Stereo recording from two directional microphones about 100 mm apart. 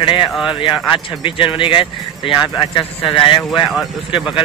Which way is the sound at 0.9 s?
55° left (ahead or behind).